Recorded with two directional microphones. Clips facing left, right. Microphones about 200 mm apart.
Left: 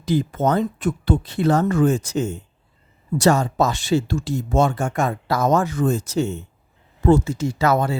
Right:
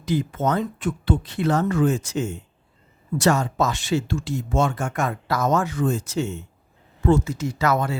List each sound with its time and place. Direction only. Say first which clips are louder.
0.0 s speech: left 3 dB; 35° left (ahead or behind)